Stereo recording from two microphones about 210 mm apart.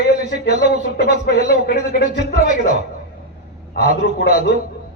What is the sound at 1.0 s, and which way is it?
Speech, 50° left (ahead or behind).